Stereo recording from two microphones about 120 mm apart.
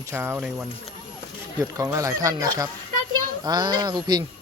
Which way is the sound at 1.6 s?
30° right (ahead or behind).